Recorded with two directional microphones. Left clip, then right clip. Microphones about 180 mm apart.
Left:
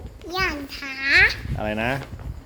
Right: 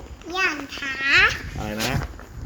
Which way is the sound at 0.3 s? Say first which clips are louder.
Right 2 dB; 40° left (ahead or behind).